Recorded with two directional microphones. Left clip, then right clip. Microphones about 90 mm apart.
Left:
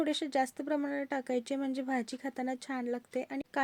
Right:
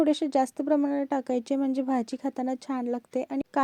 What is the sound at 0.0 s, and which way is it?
Speech, 35° right (ahead or behind).